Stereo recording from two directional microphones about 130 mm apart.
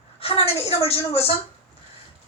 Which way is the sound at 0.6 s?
50° left (ahead or behind).